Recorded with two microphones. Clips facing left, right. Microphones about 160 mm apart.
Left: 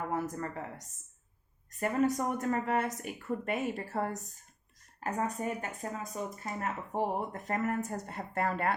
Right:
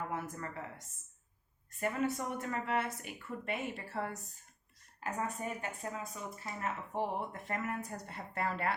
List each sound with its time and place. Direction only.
0.1 s a woman's voice: 40° left (ahead or behind)